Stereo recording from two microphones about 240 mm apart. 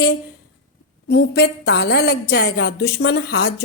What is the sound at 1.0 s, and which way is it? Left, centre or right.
A woman's voice, left.